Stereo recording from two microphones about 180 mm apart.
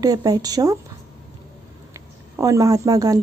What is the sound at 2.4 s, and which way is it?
Speech, 20° right (ahead or behind).